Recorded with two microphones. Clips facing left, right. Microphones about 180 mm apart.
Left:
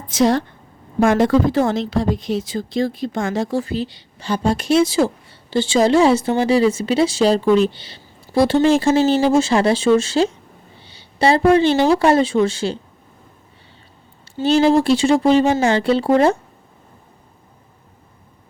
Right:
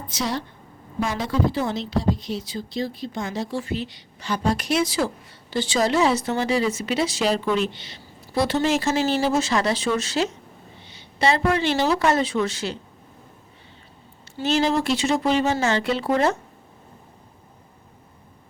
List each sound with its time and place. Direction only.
0.9 s speech: 50° left (ahead or behind)
1.2 s speech: 90° left
3.2 s a woman's voice: 50° left (ahead or behind); by 12.8 s 30° left (ahead or behind)
14.4 s speech: 30° left (ahead or behind)